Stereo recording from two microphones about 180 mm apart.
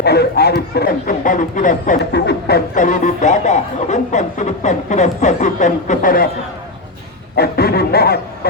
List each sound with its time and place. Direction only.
0.0 s speech: 65° left (ahead or behind); by 2.0 s 45° left (ahead or behind)
2.1 s a sound: 70° left (ahead or behind)
2.7 s speech: 45° left (ahead or behind)
7.3 s speech: 60° left (ahead or behind)